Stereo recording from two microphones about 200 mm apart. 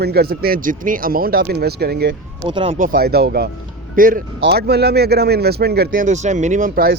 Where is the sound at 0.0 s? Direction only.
55° right (ahead or behind).